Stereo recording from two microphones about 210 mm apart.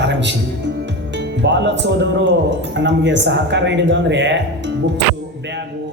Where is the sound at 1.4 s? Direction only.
55° right (ahead or behind).